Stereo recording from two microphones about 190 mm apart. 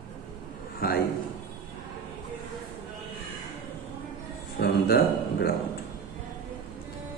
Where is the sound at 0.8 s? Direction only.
50° left (ahead or behind).